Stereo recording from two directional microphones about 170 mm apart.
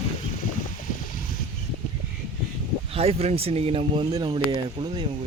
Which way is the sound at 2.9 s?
35° right (ahead or behind).